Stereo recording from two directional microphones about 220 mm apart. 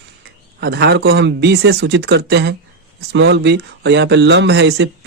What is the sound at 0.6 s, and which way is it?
Speech, 50° right (ahead or behind).